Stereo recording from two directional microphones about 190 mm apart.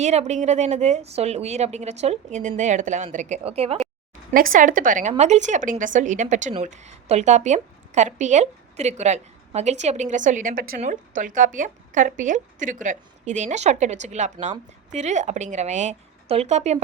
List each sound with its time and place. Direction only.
0.0 s a woman's voice: 35° right (ahead or behind)
4.3 s a woman's voice: 45° right (ahead or behind)